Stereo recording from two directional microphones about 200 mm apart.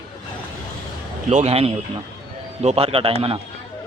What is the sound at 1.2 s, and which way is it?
A man's voice, 30° right (ahead or behind).